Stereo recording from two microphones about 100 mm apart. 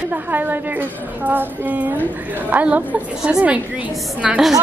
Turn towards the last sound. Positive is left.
turn(degrees=-5)  # may be behind; listen again after turning